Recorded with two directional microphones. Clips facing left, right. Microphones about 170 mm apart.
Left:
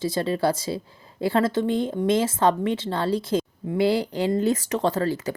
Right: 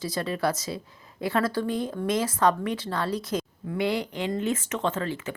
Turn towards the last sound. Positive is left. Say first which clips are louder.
# left 5 dB
turn(degrees=35)  # may be behind; listen again after turning